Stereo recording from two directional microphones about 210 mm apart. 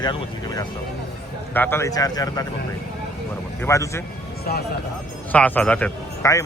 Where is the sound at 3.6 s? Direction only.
15° left (ahead or behind).